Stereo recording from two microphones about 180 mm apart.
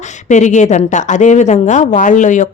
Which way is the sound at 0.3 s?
40° left (ahead or behind).